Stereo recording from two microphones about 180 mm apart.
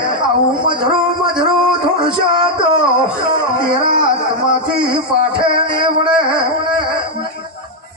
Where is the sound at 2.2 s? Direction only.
25° right (ahead or behind).